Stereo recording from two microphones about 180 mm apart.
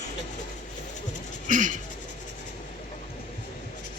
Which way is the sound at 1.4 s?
45° right (ahead or behind).